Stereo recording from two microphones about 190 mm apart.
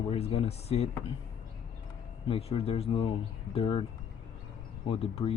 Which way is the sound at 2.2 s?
30° left (ahead or behind).